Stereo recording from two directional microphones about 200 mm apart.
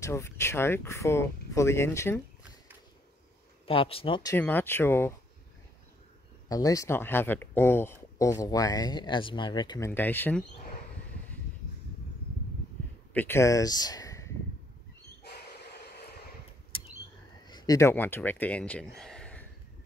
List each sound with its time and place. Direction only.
0.0 s speech: 15° left (ahead or behind)
3.6 s speech: 25° left (ahead or behind)
4.3 s speech: 10° left (ahead or behind)
6.5 s speech: 15° left (ahead or behind)
13.1 s speech: 10° left (ahead or behind)
17.5 s speech: 20° left (ahead or behind)
18.9 s a sound: 5° left (ahead or behind)